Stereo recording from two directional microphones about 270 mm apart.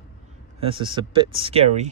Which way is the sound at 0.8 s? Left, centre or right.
Centre.